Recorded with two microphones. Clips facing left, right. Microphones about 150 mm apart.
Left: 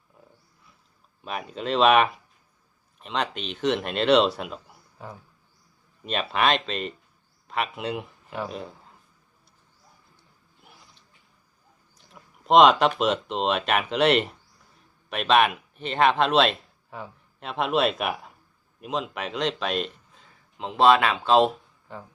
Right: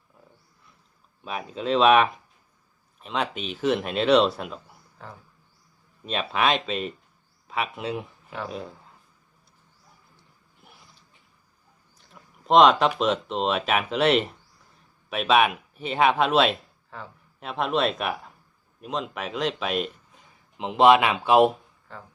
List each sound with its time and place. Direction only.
1.2 s speech: centre (ahead or behind)
6.1 s speech: centre (ahead or behind)
12.1 s speech: centre (ahead or behind)
16.9 s speech: 15° left (ahead or behind)
17.4 s speech: centre (ahead or behind)
20.6 s speech: 15° right (ahead or behind)
21.9 s speech: 15° left (ahead or behind)